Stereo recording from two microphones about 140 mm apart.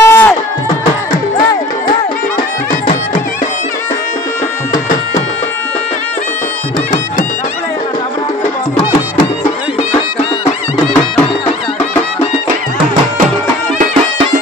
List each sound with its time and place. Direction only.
0.0 s music: 20° left (ahead or behind)